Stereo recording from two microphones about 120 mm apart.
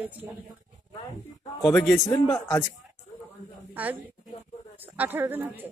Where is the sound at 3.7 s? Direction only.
15° right (ahead or behind).